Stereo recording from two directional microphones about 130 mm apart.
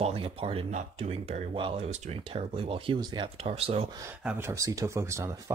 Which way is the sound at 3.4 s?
50° right (ahead or behind).